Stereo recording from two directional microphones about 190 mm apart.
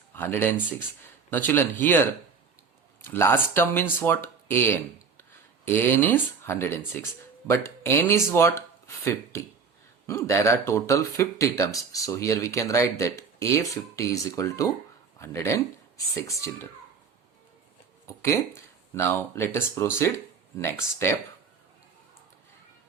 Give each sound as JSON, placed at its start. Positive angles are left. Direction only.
{"t": 0.1, "sound": "speech", "side_deg": 10}
{"t": 18.2, "sound": "speech", "side_deg": 15}